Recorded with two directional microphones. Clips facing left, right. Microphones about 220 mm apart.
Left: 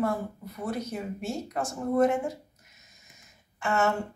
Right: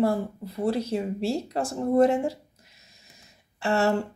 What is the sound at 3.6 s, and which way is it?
Speech, 35° right (ahead or behind).